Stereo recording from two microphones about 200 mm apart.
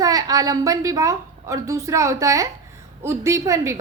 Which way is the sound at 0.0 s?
20° right (ahead or behind).